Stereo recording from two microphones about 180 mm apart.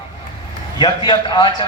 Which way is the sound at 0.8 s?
25° left (ahead or behind).